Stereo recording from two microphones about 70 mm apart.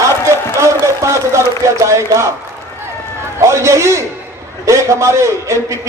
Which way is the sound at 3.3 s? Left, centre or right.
Right.